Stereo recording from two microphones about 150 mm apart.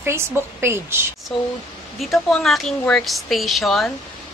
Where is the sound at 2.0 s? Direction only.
Centre (ahead or behind).